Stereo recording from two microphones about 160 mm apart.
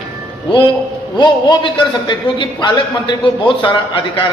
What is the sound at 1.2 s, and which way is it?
A man's voice, 30° left (ahead or behind).